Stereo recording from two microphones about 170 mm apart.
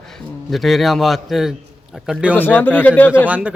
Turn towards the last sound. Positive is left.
turn(degrees=-10)  # may be behind; listen again after turning